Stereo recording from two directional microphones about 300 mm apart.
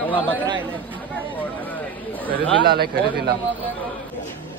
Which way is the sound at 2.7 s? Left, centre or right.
Right.